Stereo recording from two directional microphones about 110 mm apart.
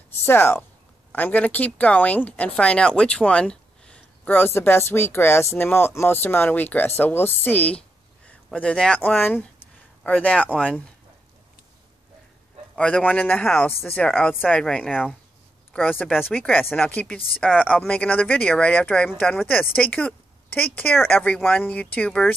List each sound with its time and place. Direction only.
0.2 s speech: 20° left (ahead or behind)
10.5 s speech: 5° right (ahead or behind)
12.7 s speech: 10° left (ahead or behind)
16.2 s speech: 15° left (ahead or behind)